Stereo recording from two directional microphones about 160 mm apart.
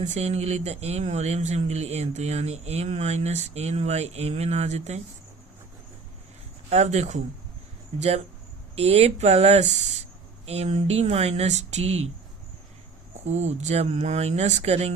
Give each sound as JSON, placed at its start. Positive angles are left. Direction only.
{"t": 0.0, "sound": "speech", "side_deg": -45}
{"t": 6.7, "sound": "speech", "side_deg": -45}
{"t": 13.2, "sound": "speech", "side_deg": -45}